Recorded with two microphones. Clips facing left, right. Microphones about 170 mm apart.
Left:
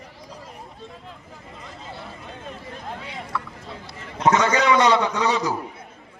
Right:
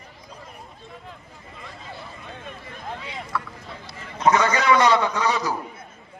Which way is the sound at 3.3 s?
20° left (ahead or behind).